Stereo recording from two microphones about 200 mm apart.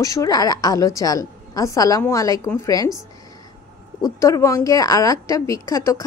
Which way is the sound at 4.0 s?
15° left (ahead or behind).